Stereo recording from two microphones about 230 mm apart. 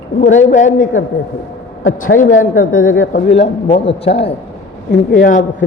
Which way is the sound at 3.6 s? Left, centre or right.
Left.